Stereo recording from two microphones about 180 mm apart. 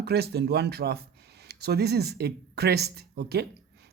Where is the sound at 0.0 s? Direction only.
60° right (ahead or behind).